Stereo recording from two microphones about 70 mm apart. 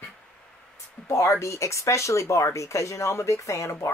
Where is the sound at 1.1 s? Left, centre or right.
Left.